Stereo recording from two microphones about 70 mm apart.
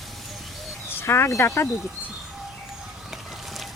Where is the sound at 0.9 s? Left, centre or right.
Left.